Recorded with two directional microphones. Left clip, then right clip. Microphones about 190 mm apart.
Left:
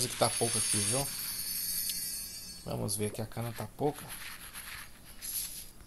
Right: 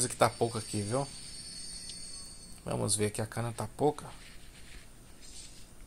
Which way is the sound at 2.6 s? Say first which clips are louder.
Right 4 dB; 15° right (ahead or behind).